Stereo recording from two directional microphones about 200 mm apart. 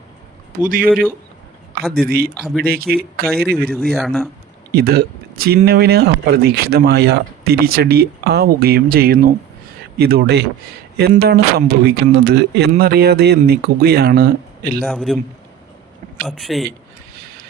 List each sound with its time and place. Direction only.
1.9 s speech: 50° right (ahead or behind)
3.9 s a man's voice: centre (ahead or behind)
4.7 s speech: 50° right (ahead or behind)
14.8 s a man's voice: centre (ahead or behind)
16.2 s a man's voice: centre (ahead or behind)